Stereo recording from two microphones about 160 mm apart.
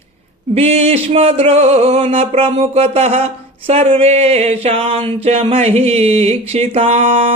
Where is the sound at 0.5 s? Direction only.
40° right (ahead or behind).